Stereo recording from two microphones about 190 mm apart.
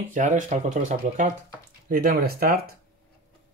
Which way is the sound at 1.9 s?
50° right (ahead or behind).